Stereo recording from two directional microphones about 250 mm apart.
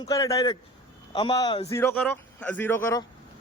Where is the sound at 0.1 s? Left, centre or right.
Centre.